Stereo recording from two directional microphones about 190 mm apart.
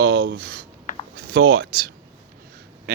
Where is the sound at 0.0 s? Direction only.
85° right.